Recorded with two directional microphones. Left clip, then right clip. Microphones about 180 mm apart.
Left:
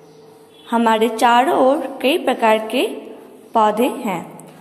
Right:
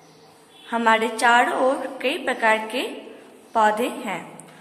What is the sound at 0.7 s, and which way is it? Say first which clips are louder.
A woman's voice: left 4 dB; 15° left (ahead or behind).